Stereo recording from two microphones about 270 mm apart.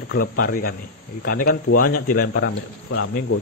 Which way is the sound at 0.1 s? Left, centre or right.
Left.